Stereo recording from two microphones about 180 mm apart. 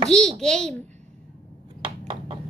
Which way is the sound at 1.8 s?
30° right (ahead or behind).